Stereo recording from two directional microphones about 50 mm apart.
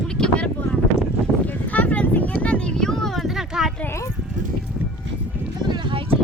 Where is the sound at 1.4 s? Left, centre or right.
Left.